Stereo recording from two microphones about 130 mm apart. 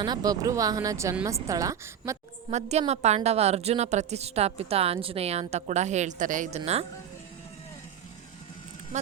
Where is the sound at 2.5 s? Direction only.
55° right (ahead or behind).